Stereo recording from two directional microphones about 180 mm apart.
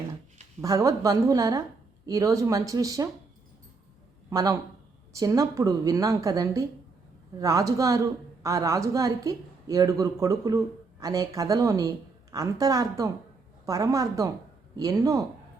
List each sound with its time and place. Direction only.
0.6 s a man's voice: 20° right (ahead or behind)
4.3 s a man's voice: 20° right (ahead or behind)